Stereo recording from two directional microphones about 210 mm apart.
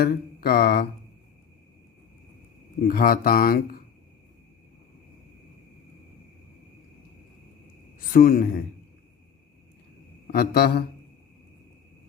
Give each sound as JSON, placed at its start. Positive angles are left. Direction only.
{"t": 0.0, "sound": "mantra", "side_deg": 45}
{"t": 2.8, "sound": "mantra", "side_deg": 45}
{"t": 7.9, "sound": "a man's voice", "side_deg": 45}
{"t": 10.3, "sound": "mantra", "side_deg": 50}